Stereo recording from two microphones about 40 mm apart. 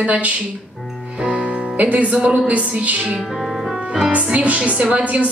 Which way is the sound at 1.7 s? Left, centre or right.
Right.